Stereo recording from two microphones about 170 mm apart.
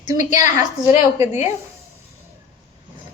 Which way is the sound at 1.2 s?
15° right (ahead or behind).